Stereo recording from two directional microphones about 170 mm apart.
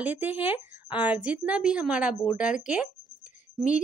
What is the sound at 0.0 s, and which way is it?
A woman's voice, 10° right (ahead or behind).